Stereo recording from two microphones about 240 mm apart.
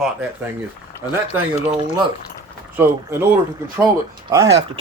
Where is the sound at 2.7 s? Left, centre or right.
Centre.